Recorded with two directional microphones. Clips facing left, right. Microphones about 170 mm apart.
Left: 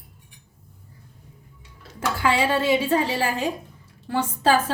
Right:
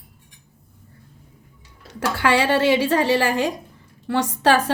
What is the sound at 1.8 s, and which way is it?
A woman's voice, 75° right (ahead or behind).